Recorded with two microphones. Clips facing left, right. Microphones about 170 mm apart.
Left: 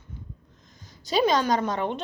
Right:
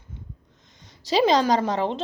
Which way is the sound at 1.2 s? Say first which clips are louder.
Right 3 dB; 30° right (ahead or behind).